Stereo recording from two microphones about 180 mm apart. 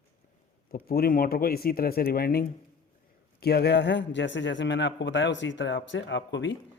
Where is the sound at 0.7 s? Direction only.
55° left (ahead or behind); by 6.5 s 90° left.